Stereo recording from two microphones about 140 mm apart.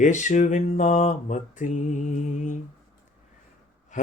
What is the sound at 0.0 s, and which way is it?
Mantra, 60° left (ahead or behind).